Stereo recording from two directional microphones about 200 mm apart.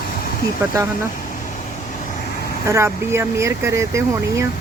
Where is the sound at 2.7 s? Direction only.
15° right (ahead or behind).